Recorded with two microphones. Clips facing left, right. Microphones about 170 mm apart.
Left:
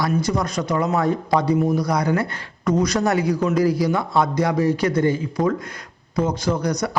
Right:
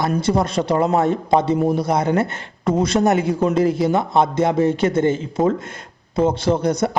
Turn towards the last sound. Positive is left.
turn(degrees=-25)  # may be behind; listen again after turning